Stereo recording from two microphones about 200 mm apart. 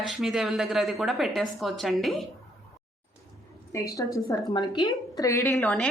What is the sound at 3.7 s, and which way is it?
A woman's voice, 15° left (ahead or behind).